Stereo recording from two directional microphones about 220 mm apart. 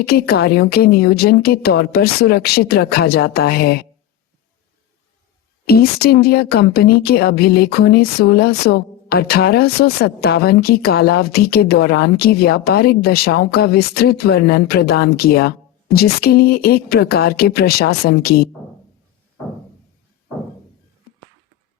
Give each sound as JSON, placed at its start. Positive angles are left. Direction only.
{"t": 0.0, "sound": "speech", "side_deg": 45}
{"t": 5.6, "sound": "speech", "side_deg": 45}